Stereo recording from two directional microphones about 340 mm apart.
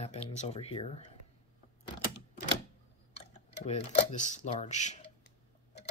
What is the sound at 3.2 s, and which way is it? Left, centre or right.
Speech, centre.